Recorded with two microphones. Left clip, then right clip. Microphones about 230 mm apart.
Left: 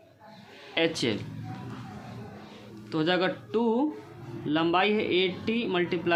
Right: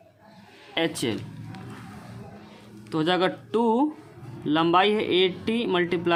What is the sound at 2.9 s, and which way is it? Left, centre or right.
Speech, right.